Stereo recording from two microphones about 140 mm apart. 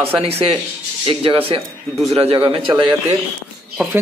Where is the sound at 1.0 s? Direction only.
40° right (ahead or behind).